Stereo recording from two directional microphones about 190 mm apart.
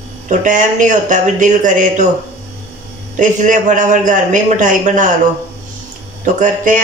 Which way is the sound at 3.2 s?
40° right (ahead or behind).